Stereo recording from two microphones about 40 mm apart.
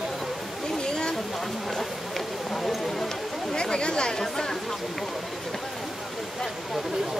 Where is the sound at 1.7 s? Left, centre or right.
Centre.